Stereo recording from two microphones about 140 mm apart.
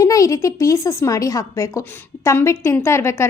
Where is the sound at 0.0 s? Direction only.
25° left (ahead or behind).